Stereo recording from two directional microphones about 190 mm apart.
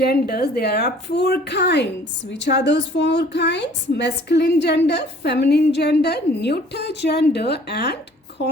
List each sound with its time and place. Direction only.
0.0 s a woman's voice: 55° left (ahead or behind)